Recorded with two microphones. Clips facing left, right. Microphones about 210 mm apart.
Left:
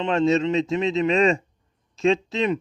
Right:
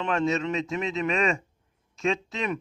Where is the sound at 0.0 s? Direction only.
30° left (ahead or behind).